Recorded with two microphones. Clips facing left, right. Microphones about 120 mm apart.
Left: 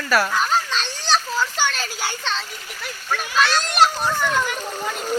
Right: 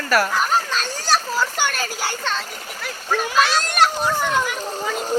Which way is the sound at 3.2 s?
30° right (ahead or behind).